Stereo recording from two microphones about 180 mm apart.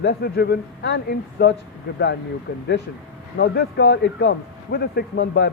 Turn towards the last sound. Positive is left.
turn(degrees=70)  # may be behind; listen again after turning